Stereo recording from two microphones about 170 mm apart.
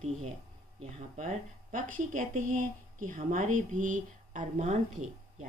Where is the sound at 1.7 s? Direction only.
50° right (ahead or behind).